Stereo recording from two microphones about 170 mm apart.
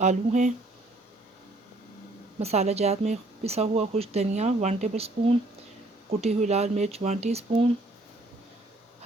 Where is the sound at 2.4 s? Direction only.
40° right (ahead or behind).